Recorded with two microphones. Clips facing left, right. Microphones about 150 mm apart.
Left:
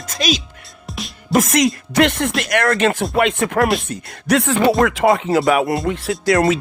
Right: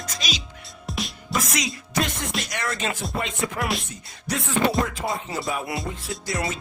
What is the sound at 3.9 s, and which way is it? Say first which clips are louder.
Speech: left 13 dB; 75° left (ahead or behind).